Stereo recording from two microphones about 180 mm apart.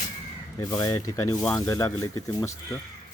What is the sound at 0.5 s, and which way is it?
Speech, 20° left (ahead or behind).